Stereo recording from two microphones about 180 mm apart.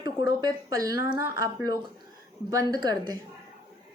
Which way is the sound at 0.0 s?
20° right (ahead or behind).